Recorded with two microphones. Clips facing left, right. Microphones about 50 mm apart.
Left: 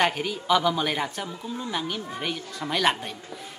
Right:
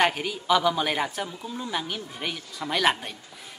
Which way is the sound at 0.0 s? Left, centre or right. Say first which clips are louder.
Even; centre.